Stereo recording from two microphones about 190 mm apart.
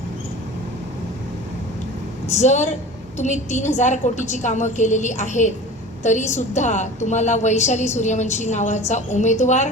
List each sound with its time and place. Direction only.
2.3 s a woman's voice: 40° left (ahead or behind)